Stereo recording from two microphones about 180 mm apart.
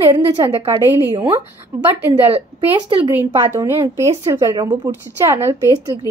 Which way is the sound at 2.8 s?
30° right (ahead or behind).